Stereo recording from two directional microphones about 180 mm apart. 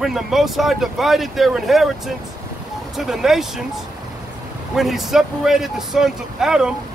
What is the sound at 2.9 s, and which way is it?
Speech, centre (ahead or behind).